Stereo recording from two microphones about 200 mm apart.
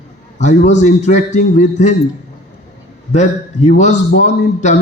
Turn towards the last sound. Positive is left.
turn(degrees=35)  # may be behind; listen again after turning